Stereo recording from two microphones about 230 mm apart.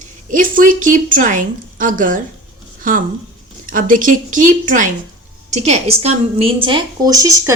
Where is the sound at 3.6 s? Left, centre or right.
Right.